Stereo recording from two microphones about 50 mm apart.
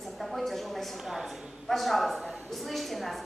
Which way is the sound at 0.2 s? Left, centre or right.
Centre.